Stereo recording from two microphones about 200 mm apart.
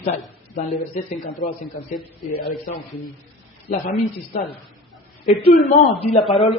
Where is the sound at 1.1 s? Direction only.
40° left (ahead or behind).